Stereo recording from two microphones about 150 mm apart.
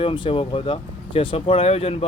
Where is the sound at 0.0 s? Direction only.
35° left (ahead or behind).